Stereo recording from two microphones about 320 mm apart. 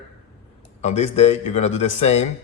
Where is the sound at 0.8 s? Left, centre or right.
Left.